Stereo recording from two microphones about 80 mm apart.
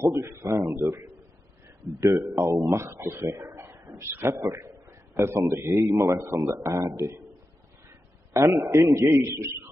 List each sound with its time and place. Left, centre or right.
0.0 s a man's voice: right
8.3 s a man's voice: right